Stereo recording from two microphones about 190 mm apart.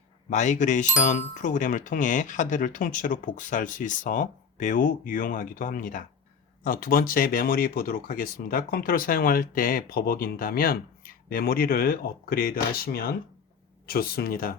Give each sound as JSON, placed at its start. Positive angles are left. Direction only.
{"t": 0.3, "sound": "speech", "side_deg": 40}